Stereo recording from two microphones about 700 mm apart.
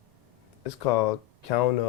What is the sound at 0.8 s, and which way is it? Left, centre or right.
Speech, left.